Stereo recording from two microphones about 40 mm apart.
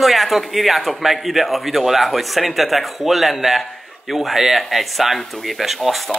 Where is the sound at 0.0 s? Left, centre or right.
Centre.